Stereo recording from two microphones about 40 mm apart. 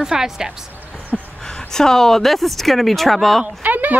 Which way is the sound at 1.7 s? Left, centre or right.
Centre.